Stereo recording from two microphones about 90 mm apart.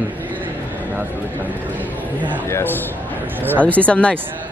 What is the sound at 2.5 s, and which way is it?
A man's voice, 20° left (ahead or behind).